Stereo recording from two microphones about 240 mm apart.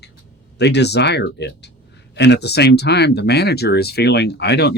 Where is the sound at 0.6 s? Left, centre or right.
Left.